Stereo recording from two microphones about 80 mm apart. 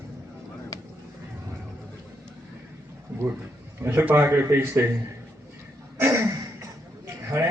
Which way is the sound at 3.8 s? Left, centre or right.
Right.